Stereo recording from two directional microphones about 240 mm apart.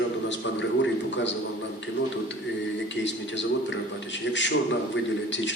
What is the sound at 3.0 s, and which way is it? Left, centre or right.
A man's voice, left.